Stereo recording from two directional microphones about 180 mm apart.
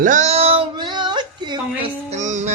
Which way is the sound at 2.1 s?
40° right (ahead or behind).